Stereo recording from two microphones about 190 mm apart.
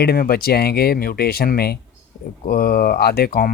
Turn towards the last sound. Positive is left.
turn(degrees=50)  # may be behind; listen again after turning